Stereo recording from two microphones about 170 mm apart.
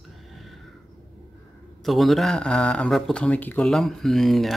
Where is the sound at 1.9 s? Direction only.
Centre (ahead or behind).